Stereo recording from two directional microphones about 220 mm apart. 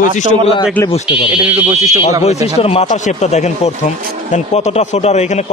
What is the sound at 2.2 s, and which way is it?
A man's voice, 30° left (ahead or behind).